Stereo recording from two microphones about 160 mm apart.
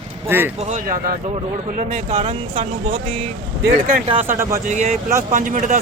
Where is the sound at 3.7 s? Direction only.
60° right (ahead or behind).